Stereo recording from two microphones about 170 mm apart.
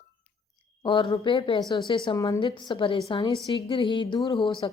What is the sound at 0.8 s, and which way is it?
A woman's voice, 25° left (ahead or behind).